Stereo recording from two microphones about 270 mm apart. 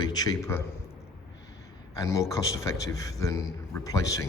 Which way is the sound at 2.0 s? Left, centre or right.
Centre.